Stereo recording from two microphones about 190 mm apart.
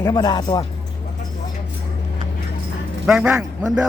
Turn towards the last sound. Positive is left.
turn(degrees=-5)  # may be behind; listen again after turning